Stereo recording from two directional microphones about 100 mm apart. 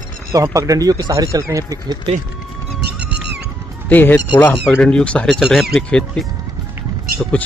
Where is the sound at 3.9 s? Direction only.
20° left (ahead or behind).